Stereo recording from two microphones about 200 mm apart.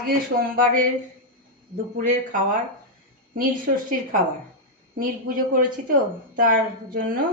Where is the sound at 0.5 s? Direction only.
40° right (ahead or behind).